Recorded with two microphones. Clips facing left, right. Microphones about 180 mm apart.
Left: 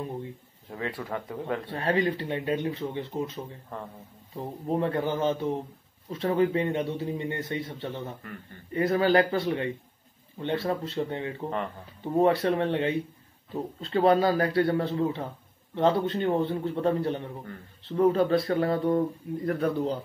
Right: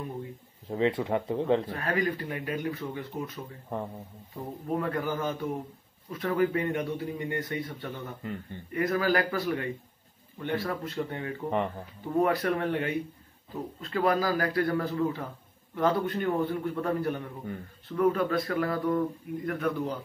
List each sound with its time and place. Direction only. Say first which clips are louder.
0.7 s speech: right 7 dB; 20° right (ahead or behind)
1.7 s speech: left 3 dB; 30° left (ahead or behind)
3.7 s speech: right 5 dB; 15° right (ahead or behind)
4.6 s speech: left 3 dB; 25° left (ahead or behind)